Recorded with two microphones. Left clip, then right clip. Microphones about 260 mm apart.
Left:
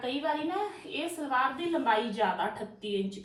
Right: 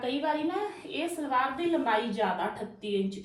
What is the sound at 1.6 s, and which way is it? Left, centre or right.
A woman's voice, centre.